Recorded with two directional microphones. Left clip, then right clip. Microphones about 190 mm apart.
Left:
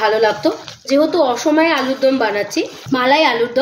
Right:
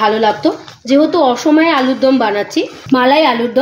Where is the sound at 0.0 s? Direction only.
50° right (ahead or behind).